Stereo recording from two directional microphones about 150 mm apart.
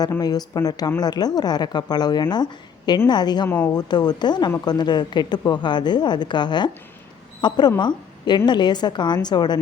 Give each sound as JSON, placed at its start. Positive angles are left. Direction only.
{"t": 0.1, "sound": "a woman's voice", "side_deg": 25}